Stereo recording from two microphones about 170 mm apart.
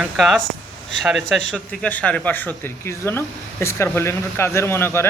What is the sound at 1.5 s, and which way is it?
Speech, 5° left (ahead or behind).